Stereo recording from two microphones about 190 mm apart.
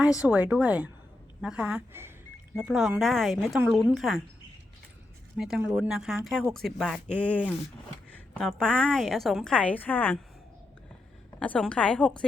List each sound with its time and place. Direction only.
0.2 s a woman's voice: 5° right (ahead or behind)
2.6 s a woman's voice: centre (ahead or behind)
5.4 s a woman's voice: 5° right (ahead or behind)
11.3 s a woman's voice: 5° left (ahead or behind)